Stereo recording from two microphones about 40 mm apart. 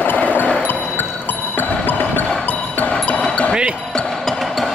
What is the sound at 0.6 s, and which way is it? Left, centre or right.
Music, left.